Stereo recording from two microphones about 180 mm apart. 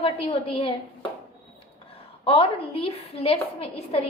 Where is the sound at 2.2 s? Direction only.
30° left (ahead or behind).